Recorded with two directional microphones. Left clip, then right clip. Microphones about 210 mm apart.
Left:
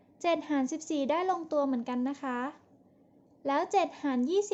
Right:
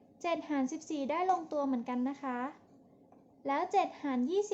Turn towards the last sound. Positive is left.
turn(degrees=15)  # may be behind; listen again after turning